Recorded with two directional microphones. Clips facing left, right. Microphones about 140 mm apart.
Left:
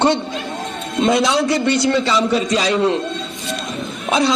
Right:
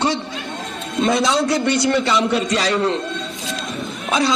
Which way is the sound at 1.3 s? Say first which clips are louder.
Left 1 dB; centre (ahead or behind).